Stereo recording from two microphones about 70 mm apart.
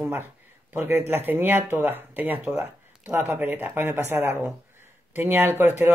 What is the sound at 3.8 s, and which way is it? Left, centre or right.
Speech, right.